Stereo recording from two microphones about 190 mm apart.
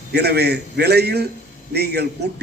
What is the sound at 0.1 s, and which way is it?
A man's voice, 60° right (ahead or behind).